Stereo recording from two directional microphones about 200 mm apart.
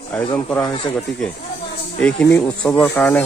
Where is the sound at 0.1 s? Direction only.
5° left (ahead or behind).